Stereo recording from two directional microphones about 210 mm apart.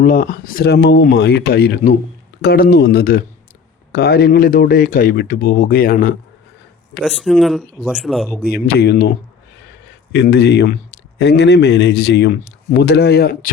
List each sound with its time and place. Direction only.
0.0 s speech: 40° left (ahead or behind)
7.0 s speech: centre (ahead or behind)
8.4 s speech: 45° left (ahead or behind)